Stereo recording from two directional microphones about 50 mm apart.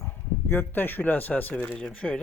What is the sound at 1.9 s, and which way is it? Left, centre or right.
Speech, left.